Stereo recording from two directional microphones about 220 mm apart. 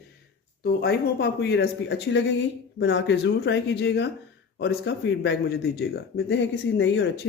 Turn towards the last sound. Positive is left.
turn(degrees=55)  # may be behind; listen again after turning